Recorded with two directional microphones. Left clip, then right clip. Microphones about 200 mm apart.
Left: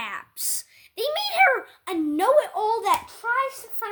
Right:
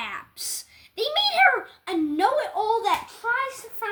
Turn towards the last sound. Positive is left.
turn(degrees=40)  # may be behind; listen again after turning